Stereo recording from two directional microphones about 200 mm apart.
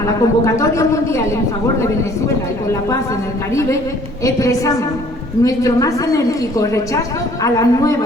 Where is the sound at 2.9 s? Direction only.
15° left (ahead or behind).